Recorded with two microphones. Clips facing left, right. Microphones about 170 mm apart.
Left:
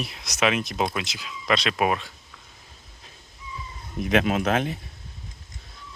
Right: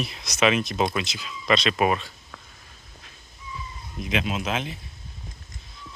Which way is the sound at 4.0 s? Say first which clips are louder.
Left 6 dB; 60° left (ahead or behind).